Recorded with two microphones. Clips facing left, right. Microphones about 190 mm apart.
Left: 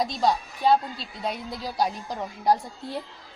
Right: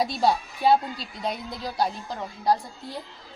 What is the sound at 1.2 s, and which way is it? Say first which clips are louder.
A woman's voice: even; 5° left (ahead or behind).